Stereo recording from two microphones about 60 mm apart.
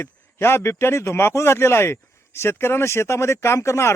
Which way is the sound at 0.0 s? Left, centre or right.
Left.